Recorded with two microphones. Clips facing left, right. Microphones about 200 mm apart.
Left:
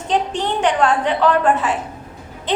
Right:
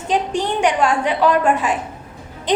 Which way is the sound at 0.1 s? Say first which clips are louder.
Even; 10° right (ahead or behind).